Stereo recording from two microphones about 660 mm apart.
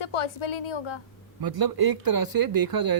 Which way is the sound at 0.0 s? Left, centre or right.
Left.